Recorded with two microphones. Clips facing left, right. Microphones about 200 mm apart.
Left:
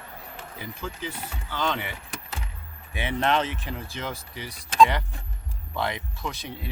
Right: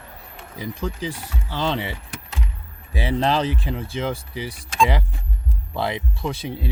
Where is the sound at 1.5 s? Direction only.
30° right (ahead or behind).